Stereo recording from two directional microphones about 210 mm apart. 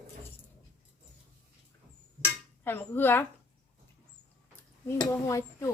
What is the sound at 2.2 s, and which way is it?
Dishes, 10° left (ahead or behind).